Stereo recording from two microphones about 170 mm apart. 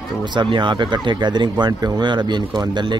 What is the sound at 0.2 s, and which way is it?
Speech, 25° right (ahead or behind).